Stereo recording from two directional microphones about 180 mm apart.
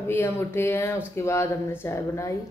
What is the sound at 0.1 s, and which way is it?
Speech, 10° left (ahead or behind).